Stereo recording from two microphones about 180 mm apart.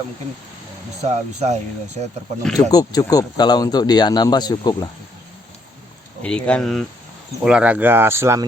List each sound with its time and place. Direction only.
1.0 s speech: 40° right (ahead or behind)
2.4 s speech: 5° left (ahead or behind)
2.6 s speech: 20° left (ahead or behind)
6.2 s speech: 5° left (ahead or behind); by 8.4 s 15° right (ahead or behind)